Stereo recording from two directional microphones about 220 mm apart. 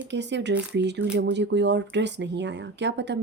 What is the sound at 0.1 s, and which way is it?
Speech, 55° right (ahead or behind).